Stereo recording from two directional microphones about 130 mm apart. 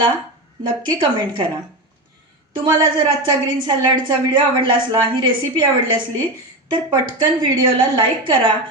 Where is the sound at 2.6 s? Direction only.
35° right (ahead or behind).